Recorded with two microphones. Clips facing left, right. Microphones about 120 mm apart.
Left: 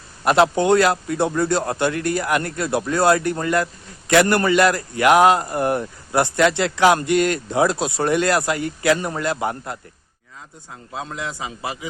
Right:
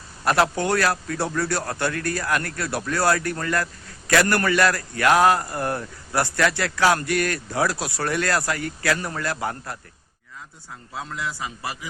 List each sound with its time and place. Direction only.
0.3 s a man's voice: 20° left (ahead or behind)
10.9 s a man's voice: 20° left (ahead or behind)